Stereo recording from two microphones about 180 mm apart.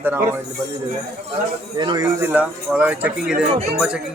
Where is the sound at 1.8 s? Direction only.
25° right (ahead or behind).